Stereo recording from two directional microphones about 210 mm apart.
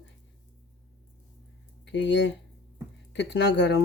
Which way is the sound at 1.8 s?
55° left (ahead or behind).